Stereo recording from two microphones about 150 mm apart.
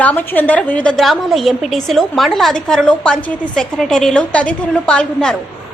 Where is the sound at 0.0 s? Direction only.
10° left (ahead or behind).